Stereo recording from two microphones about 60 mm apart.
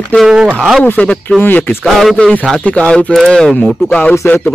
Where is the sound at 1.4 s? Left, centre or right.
Left.